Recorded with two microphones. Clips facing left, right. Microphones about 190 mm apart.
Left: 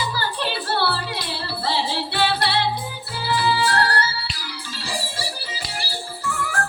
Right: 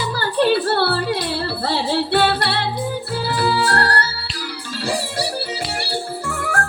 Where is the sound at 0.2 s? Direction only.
55° right (ahead or behind).